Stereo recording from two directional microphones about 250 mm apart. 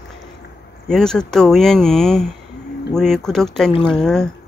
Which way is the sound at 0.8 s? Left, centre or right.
Centre.